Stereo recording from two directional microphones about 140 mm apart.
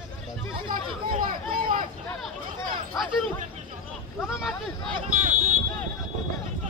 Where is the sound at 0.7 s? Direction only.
80° right.